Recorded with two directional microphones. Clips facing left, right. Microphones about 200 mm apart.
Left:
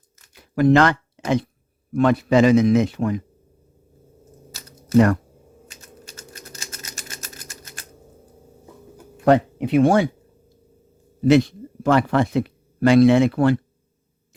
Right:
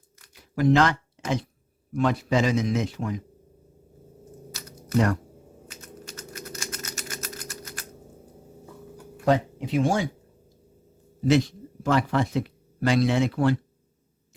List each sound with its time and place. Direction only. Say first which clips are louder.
0.3 s a sound: left 5 dB; 60° left (ahead or behind)
1.9 s a man's voice: left 6 dB; 60° left (ahead or behind)
6.1 s typing: right 4 dB; 30° left (ahead or behind)
9.2 s a man's voice: left 6 dB; 60° left (ahead or behind)
11.3 s speech: left 6 dB; 60° left (ahead or behind)